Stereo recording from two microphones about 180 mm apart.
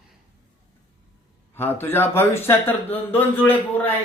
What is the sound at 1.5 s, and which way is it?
Speech, 10° left (ahead or behind).